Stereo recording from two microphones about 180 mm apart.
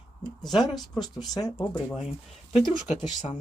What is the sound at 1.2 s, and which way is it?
Speech, 20° left (ahead or behind).